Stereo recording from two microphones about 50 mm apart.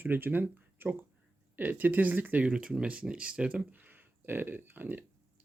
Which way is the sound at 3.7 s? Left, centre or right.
Right.